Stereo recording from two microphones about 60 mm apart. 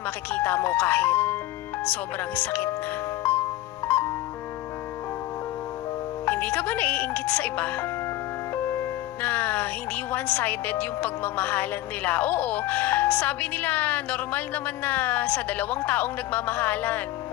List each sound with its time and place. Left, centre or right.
0.3 s speech: left
3.2 s music: left
6.2 s speech: left